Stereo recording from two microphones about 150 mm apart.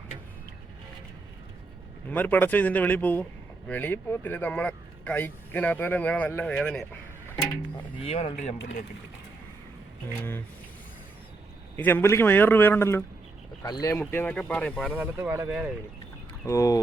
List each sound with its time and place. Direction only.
2.0 s speech: 10° left (ahead or behind)
8.0 s speech: 45° left (ahead or behind)
11.8 s speech: 15° left (ahead or behind)
14.1 s speech: 10° left (ahead or behind)
14.9 s speech: 15° right (ahead or behind)
16.5 s speech: 20° left (ahead or behind)